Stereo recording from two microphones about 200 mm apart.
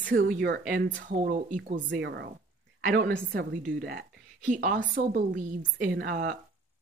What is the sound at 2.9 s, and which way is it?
Speech, 45° right (ahead or behind).